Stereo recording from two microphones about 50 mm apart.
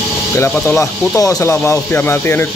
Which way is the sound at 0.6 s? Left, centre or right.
Left.